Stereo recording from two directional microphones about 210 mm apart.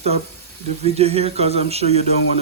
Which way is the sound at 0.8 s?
30° right (ahead or behind).